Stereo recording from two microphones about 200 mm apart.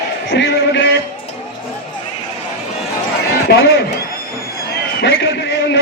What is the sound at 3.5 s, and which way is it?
Speech, 60° left (ahead or behind).